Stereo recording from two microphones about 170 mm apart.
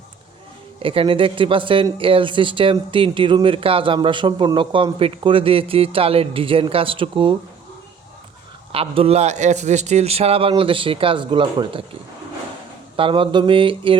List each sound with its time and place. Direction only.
0.8 s speech: 35° right (ahead or behind)
8.7 s speech: 35° right (ahead or behind)
13.0 s speech: 30° right (ahead or behind)